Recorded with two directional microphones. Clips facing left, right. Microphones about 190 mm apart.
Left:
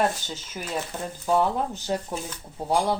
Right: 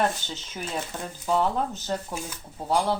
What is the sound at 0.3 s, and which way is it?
Speech, 10° left (ahead or behind).